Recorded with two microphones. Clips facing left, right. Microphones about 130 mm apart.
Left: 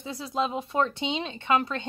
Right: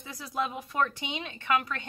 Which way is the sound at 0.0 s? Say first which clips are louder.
Left 4 dB; 25° left (ahead or behind).